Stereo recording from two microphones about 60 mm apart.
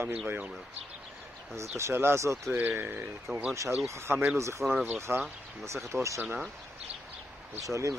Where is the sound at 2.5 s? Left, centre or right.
Right.